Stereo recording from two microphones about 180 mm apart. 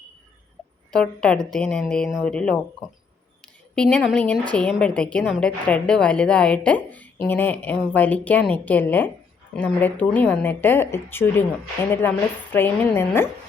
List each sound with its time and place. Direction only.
0.9 s a woman's voice: 5° left (ahead or behind)
3.8 s a woman's voice: 5° left (ahead or behind)